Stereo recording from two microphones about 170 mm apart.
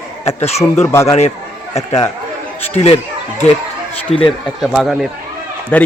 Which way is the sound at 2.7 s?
35° left (ahead or behind).